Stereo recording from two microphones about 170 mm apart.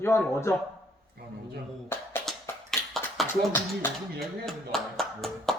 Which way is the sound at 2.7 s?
Centre (ahead or behind).